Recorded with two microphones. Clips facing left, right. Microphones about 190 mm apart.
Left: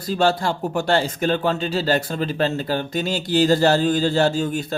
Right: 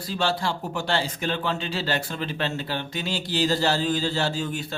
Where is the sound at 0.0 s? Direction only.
45° left (ahead or behind).